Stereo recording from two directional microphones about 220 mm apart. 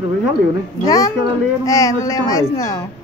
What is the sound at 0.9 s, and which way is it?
A woman's voice, 15° left (ahead or behind).